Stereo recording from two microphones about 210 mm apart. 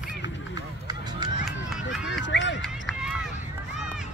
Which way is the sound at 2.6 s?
Centre (ahead or behind).